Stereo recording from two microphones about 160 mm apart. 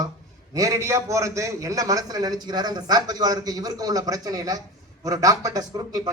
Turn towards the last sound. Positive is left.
turn(degrees=-25)  # may be behind; listen again after turning